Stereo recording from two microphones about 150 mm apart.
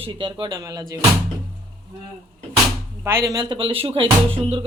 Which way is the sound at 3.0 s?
20° right (ahead or behind).